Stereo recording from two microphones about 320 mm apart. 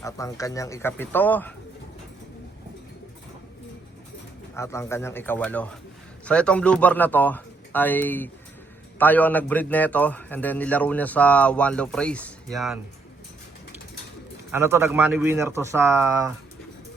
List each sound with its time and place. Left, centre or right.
0.0 s speech: centre
4.5 s a man's voice: centre
14.5 s speech: centre